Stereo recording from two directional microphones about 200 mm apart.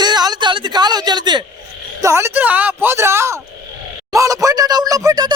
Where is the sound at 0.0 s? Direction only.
20° right (ahead or behind).